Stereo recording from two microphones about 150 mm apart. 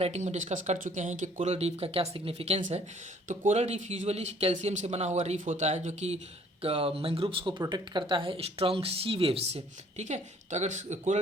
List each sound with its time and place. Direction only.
0.0 s speech: 50° right (ahead or behind)